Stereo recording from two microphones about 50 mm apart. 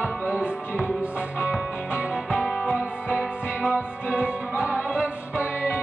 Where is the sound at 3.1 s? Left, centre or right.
Right.